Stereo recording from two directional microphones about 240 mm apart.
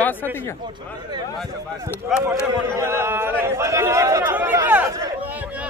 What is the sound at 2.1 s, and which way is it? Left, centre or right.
Speech, centre.